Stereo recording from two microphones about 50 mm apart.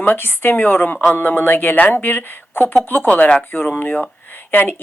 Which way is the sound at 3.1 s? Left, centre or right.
Left.